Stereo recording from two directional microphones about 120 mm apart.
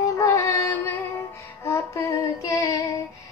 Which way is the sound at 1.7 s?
25° left (ahead or behind).